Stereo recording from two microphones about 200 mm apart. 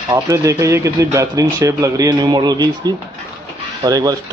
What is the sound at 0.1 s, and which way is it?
Speech, 15° right (ahead or behind).